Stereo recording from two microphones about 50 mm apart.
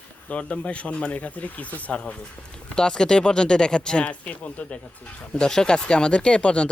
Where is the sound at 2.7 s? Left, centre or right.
Centre.